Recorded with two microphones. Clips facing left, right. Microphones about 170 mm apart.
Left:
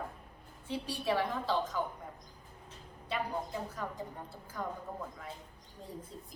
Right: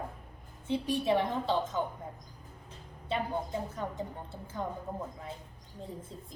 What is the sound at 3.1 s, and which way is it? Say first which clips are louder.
A woman's voice: right 3 dB; 25° right (ahead or behind).